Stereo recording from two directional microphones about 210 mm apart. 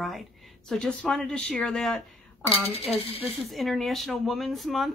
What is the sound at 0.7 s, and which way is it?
Speech, 5° left (ahead or behind).